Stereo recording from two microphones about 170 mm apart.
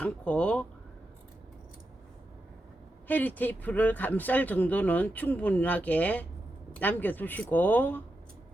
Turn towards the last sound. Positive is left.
turn(degrees=10)  # may be behind; listen again after turning